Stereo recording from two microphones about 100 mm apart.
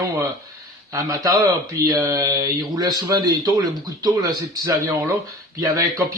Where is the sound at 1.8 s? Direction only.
35° right (ahead or behind).